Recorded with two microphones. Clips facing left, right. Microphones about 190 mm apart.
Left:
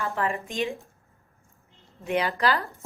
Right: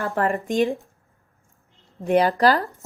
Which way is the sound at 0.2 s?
50° right (ahead or behind).